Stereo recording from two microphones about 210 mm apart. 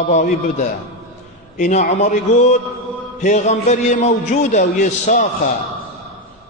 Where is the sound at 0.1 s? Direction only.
35° left (ahead or behind).